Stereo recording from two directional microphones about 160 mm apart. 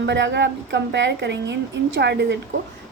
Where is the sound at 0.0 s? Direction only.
90° right.